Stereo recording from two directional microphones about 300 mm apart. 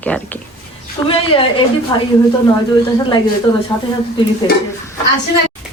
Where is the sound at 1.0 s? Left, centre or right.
Centre.